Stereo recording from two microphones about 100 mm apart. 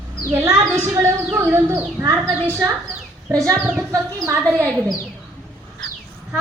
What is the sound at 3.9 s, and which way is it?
Speech, 30° right (ahead or behind).